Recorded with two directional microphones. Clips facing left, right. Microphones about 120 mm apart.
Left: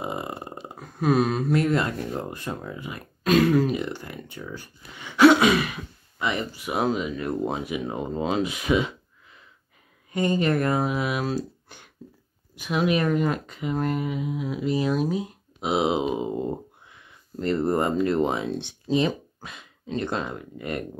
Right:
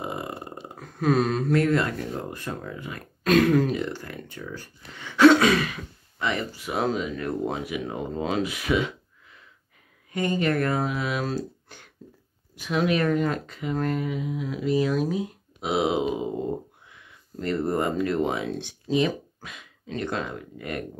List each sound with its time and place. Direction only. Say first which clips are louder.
0.1 s burping: left 1 dB; 20° left (ahead or behind)
0.7 s speech: left 1 dB; 10° left (ahead or behind)
3.3 s a sound: even; centre (ahead or behind)
3.6 s speech: left 1 dB; 15° left (ahead or behind)
10.1 s speech: left 2 dB; 25° left (ahead or behind)
17.4 s speech: left 2 dB; 30° left (ahead or behind)